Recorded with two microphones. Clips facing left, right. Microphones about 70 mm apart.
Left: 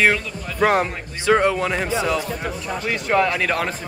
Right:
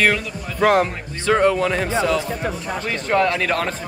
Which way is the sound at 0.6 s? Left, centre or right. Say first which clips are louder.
Right 2 dB; centre.